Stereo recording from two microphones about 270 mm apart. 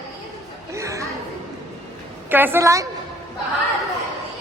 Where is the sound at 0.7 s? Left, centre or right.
Centre.